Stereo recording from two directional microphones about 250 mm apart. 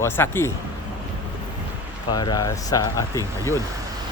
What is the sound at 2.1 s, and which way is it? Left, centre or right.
Speech, centre.